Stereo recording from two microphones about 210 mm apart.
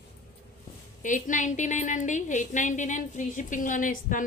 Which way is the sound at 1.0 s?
35° left (ahead or behind).